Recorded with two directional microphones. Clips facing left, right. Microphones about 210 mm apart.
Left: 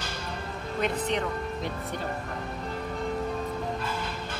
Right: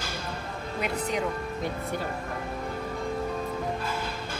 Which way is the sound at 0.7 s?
5° right (ahead or behind).